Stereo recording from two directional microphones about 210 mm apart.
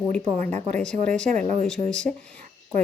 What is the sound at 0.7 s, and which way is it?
Speech, 5° left (ahead or behind).